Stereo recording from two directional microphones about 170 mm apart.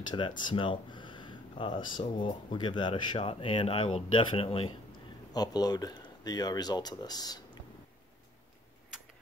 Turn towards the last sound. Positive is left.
turn(degrees=25)  # may be behind; listen again after turning